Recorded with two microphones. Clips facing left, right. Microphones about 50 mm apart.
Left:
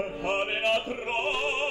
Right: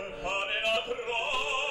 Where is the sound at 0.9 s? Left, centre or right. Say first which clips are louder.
Left 3 dB; left.